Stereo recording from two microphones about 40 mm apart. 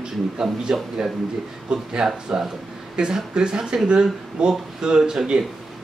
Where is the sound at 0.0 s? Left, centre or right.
Centre.